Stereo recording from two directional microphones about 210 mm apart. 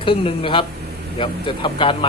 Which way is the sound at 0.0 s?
25° left (ahead or behind).